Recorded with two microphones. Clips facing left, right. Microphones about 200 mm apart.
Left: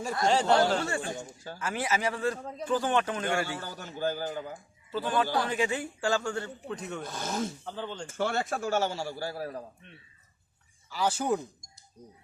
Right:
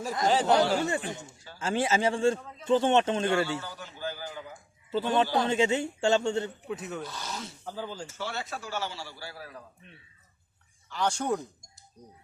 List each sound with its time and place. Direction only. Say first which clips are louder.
0.3 s speech: right 1 dB; centre (ahead or behind)
0.9 s a man's voice: right 1 dB; 20° right (ahead or behind)
3.6 s a man's voice: left 5 dB; 45° left (ahead or behind)
4.9 s a man's voice: right 3 dB; 25° right (ahead or behind)
6.7 s speech: right 1 dB; 5° right (ahead or behind)
7.0 s a man's voice: left 5 dB; 50° left (ahead or behind)
7.6 s speech: even; 10° right (ahead or behind)
8.0 s a man's voice: left 6 dB; 50° left (ahead or behind)
10.8 s speech: left 1 dB; 5° left (ahead or behind)